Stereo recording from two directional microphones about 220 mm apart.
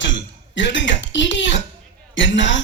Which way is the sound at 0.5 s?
55° left (ahead or behind).